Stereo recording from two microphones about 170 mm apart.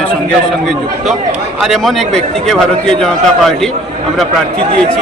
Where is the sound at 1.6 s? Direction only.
Centre (ahead or behind).